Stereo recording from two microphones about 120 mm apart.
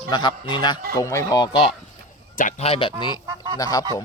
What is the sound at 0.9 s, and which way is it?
Speech, 25° left (ahead or behind).